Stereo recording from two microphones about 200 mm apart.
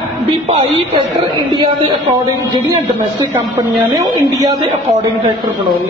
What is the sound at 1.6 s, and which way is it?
Speech, 20° right (ahead or behind).